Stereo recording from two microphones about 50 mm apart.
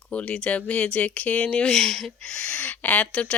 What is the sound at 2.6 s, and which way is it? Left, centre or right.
Speech, left.